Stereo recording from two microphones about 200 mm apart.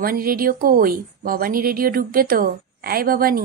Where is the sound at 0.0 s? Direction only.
45° right (ahead or behind).